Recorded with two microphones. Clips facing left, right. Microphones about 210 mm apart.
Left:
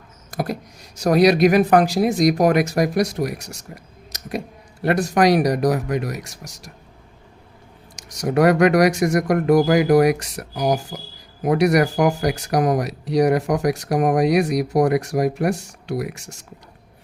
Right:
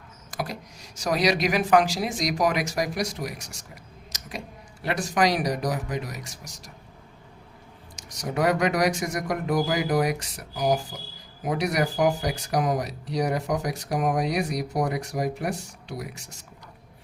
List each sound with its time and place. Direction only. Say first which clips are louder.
0.3 s speech: left 7 dB; 60° left (ahead or behind)
7.9 s speech: left 9 dB; 70° left (ahead or behind)